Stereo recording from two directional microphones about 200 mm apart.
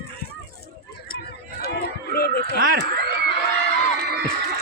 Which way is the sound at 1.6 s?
50° left (ahead or behind).